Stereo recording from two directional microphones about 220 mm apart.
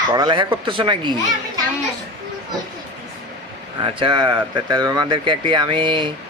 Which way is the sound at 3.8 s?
20° right (ahead or behind).